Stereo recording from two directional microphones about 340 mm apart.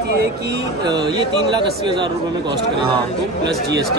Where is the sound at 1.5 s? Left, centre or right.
Centre.